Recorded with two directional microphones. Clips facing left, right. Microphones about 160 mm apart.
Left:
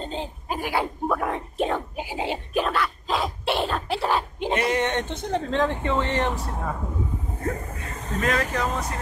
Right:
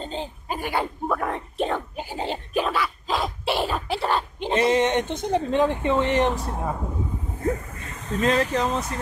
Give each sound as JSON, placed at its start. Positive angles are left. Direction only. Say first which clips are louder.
{"t": 0.0, "sound": "a sound", "louder": "even", "side_deg": 0}
{"t": 4.6, "sound": "speech", "louder": "right 5 dB", "side_deg": -20}
{"t": 8.2, "sound": "speech", "louder": "right 3 dB", "side_deg": -25}